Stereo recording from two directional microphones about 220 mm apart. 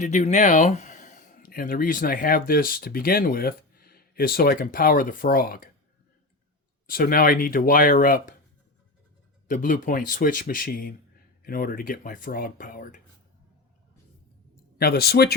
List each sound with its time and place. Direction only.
0.0 s speech: 30° left (ahead or behind)
6.8 s speech: 40° left (ahead or behind)
9.5 s speech: 35° left (ahead or behind)
14.8 s speech: 45° left (ahead or behind)